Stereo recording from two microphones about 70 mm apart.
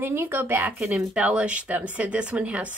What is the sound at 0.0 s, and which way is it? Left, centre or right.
Speech, right.